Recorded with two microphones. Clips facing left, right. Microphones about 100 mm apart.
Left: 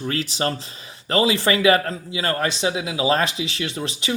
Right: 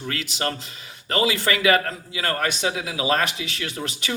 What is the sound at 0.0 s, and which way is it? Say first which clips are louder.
Speech: left 4 dB; 35° left (ahead or behind).